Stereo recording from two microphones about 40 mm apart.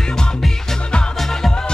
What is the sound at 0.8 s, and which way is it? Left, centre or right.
Music, left.